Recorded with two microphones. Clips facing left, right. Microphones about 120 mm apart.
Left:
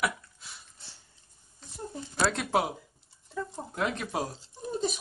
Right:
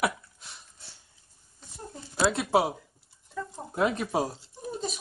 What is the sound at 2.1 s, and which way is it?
Speech, 5° right (ahead or behind).